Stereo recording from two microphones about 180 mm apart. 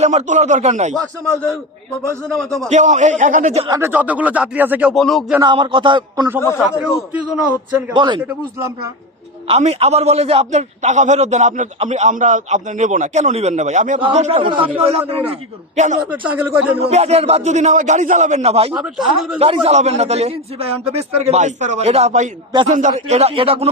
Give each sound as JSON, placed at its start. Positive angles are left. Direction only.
{"t": 0.0, "sound": "a man's voice", "side_deg": -40}
{"t": 1.2, "sound": "a man's voice", "side_deg": 5}
{"t": 2.6, "sound": "a man's voice", "side_deg": -40}
{"t": 3.7, "sound": "speech", "side_deg": -15}
{"t": 5.4, "sound": "speech", "side_deg": -25}
{"t": 7.9, "sound": "speech", "side_deg": -25}
{"t": 8.2, "sound": "speech", "side_deg": -15}
{"t": 9.5, "sound": "a man's voice", "side_deg": -35}
{"t": 16.3, "sound": "speech", "side_deg": -10}
{"t": 16.7, "sound": "a man's voice", "side_deg": -35}
{"t": 18.7, "sound": "speech", "side_deg": -5}
{"t": 19.4, "sound": "a man's voice", "side_deg": -35}